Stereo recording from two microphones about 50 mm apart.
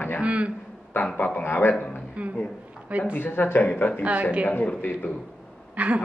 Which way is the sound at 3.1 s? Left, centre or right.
Left.